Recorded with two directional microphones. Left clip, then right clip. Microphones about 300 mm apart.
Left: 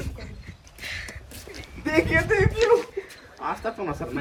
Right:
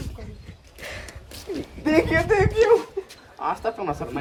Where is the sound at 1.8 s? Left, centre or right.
Right.